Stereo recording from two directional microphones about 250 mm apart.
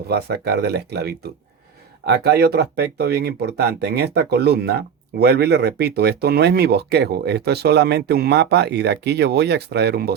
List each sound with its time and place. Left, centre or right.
0.1 s speech: right